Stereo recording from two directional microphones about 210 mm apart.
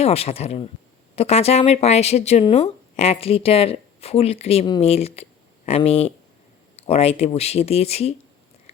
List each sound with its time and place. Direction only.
0.0 s speech: 30° left (ahead or behind)